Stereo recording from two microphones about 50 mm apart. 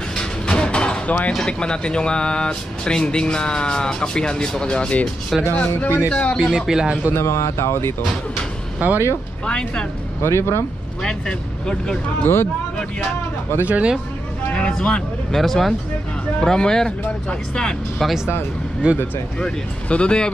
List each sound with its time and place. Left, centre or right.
0.1 s a sound: centre
1.0 s speech: left
1.6 s speech: centre
5.5 s speech: left
6.3 s speech: centre
7.1 s speech: left
8.7 s speech: right
9.5 s speech: centre
10.2 s speech: left
11.0 s speech: centre
13.7 s speech: right
14.5 s speech: centre
18.8 s speech: right
19.4 s speech: left